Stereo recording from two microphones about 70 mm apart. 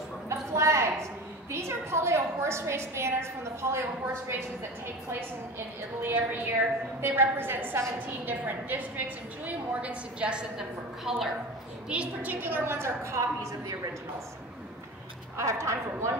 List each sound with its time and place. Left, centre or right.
0.3 s a sound: right
3.7 s a woman's voice: right
5.9 s a woman's voice: right
11.1 s a woman's voice: centre
11.9 s a woman's voice: centre; by 13.7 s right
15.3 s a woman's voice: right